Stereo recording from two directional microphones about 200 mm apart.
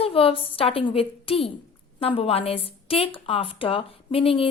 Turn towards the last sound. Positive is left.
turn(degrees=25)  # may be behind; listen again after turning